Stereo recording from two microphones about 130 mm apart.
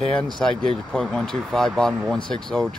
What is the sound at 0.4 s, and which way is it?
Speech, 5° left (ahead or behind).